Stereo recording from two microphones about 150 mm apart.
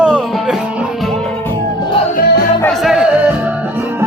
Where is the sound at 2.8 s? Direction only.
Centre (ahead or behind).